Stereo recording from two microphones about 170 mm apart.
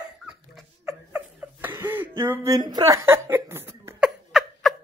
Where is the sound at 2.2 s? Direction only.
15° right (ahead or behind).